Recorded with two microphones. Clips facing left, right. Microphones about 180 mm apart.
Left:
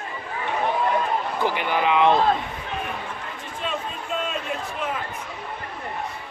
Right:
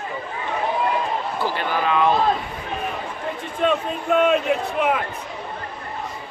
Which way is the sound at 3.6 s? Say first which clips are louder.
Right 9 dB; 60° right (ahead or behind).